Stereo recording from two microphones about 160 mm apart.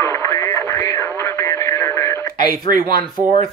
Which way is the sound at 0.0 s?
20° left (ahead or behind).